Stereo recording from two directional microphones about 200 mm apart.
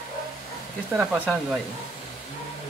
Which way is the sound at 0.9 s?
5° right (ahead or behind).